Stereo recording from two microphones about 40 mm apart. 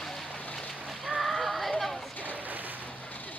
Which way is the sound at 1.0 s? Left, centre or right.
Centre.